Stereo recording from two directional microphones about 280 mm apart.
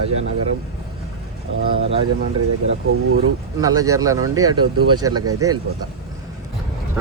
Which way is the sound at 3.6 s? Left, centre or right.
Centre.